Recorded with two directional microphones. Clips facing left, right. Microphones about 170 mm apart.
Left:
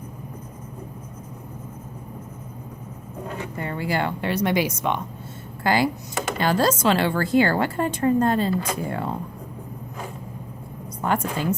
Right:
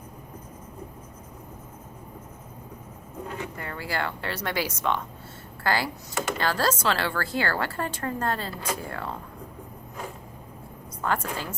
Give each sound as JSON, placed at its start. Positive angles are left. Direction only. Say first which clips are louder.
{"t": 3.6, "sound": "a woman's voice", "louder": "left 7 dB", "side_deg": 20}
{"t": 11.0, "sound": "a woman's voice", "louder": "left 4 dB", "side_deg": 20}